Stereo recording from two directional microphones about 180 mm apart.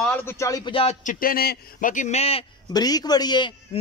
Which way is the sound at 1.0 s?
55° left (ahead or behind).